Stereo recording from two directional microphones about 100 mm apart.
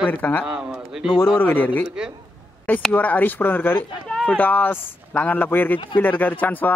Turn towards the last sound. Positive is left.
turn(degrees=20)  # may be behind; listen again after turning